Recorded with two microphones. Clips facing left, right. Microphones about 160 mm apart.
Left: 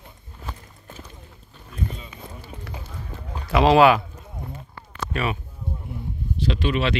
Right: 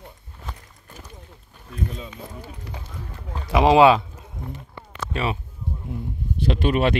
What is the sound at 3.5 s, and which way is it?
Speech, 15° right (ahead or behind).